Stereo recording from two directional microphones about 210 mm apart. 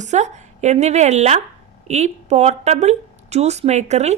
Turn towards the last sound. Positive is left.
turn(degrees=-30)  # may be behind; listen again after turning